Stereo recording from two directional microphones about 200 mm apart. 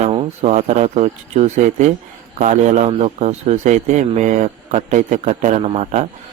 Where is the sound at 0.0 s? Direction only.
30° right (ahead or behind).